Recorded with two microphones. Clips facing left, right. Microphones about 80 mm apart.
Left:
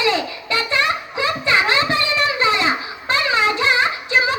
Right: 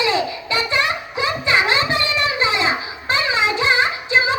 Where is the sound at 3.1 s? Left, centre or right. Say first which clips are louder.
Left 1 dB; centre.